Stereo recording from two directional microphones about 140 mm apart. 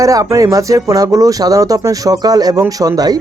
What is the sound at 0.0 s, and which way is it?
Speech, 25° right (ahead or behind).